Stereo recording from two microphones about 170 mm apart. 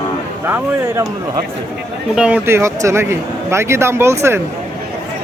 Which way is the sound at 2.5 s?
15° right (ahead or behind).